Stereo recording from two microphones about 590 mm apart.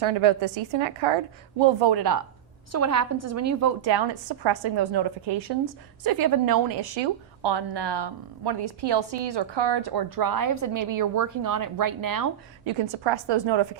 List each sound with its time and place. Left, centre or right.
0.0 s a woman's voice: right
3.9 s a woman's voice: right
12.6 s a woman's voice: right